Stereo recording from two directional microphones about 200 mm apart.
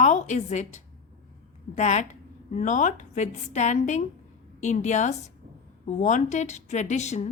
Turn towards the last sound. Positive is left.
turn(degrees=35)  # may be behind; listen again after turning